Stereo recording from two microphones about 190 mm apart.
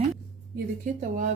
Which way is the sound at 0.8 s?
40° right (ahead or behind).